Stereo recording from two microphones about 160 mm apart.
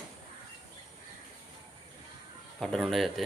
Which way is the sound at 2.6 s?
5° left (ahead or behind).